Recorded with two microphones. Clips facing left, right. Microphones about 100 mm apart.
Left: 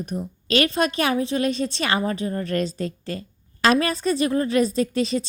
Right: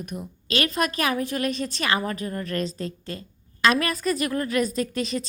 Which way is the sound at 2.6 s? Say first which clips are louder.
Left 3 dB; 35° right (ahead or behind).